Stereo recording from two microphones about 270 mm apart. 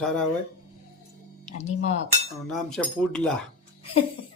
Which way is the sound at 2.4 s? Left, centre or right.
Centre.